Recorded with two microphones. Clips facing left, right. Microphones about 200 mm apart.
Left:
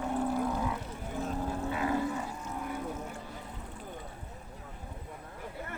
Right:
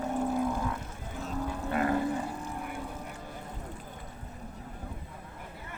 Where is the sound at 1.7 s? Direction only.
55° right (ahead or behind).